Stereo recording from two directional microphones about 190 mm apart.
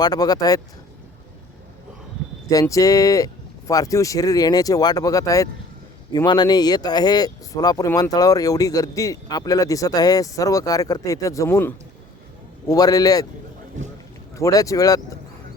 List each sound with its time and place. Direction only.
0.0 s speech: 20° left (ahead or behind)
2.5 s speech: 20° left (ahead or behind)
14.3 s speech: 15° left (ahead or behind)